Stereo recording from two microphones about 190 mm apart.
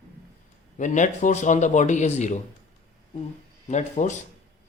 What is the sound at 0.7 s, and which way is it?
Speech, 40° left (ahead or behind).